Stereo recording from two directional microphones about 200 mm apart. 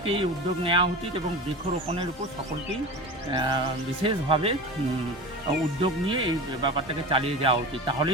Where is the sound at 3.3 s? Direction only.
25° right (ahead or behind).